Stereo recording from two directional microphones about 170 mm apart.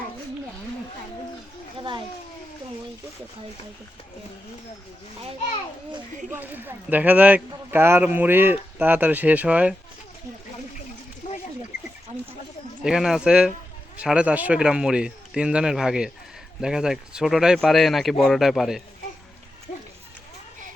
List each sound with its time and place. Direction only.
6.3 s speech: 10° right (ahead or behind)
11.2 s a sound: 50° left (ahead or behind)
12.8 s a man's voice: 5° right (ahead or behind)